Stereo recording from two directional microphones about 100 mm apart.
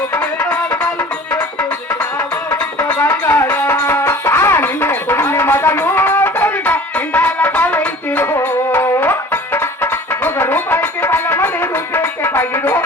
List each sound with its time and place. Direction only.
3.0 s music: 20° left (ahead or behind)
3.8 s music: 30° left (ahead or behind)